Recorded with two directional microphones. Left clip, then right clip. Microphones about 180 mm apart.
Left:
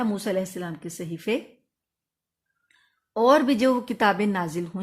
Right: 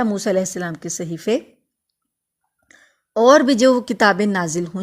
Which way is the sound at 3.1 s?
30° right (ahead or behind).